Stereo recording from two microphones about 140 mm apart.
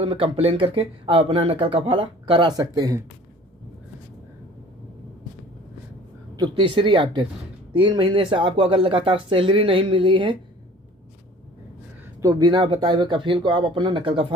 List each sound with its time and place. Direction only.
0.0 s speech: 40° right (ahead or behind)
2.6 s speech: 25° right (ahead or behind)
6.3 s speech: 35° right (ahead or behind)
12.2 s speech: 30° right (ahead or behind)